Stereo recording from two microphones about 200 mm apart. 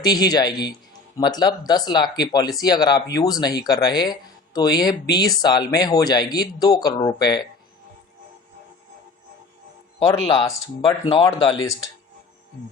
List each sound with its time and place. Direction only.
0.0 s speech: 20° left (ahead or behind)
10.0 s speech: 25° left (ahead or behind)